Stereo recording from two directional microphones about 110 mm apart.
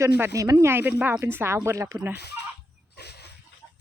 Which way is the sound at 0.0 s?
30° right (ahead or behind).